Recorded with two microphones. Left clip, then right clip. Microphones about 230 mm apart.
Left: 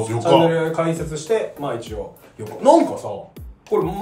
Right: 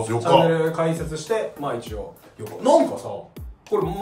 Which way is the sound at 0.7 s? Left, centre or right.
Centre.